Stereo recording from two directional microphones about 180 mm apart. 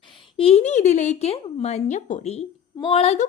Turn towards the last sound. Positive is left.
turn(degrees=35)  # may be behind; listen again after turning